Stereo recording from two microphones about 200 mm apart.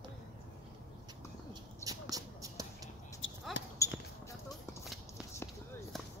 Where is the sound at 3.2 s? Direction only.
70° left (ahead or behind).